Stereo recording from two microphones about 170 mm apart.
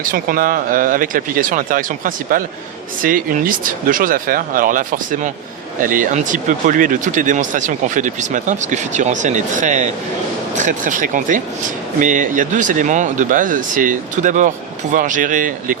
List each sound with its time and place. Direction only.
0.0 s speech: 55° right (ahead or behind)